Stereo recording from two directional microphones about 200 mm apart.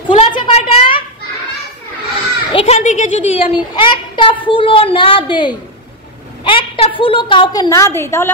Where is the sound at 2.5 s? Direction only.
30° left (ahead or behind).